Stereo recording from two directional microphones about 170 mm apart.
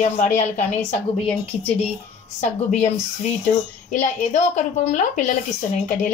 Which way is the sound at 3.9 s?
45° left (ahead or behind).